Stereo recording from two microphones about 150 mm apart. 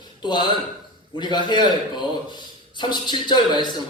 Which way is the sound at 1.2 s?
30° left (ahead or behind).